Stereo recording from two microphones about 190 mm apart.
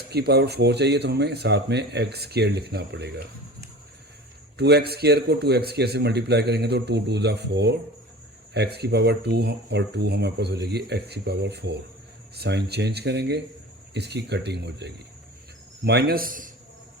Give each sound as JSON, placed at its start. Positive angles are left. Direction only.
{"t": 0.1, "sound": "a man's voice", "side_deg": -60}
{"t": 4.5, "sound": "a man's voice", "side_deg": -60}